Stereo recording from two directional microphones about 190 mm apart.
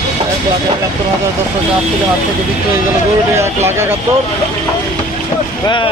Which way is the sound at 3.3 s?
15° right (ahead or behind).